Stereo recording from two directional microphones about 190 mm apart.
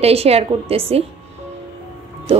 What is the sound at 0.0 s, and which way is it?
A woman's voice, 30° right (ahead or behind).